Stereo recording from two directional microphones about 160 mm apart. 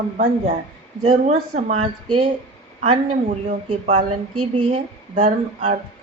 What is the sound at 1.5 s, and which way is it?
Speech, 50° right (ahead or behind).